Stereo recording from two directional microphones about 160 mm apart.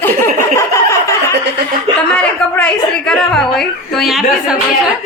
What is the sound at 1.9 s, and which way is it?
Speech, 30° right (ahead or behind).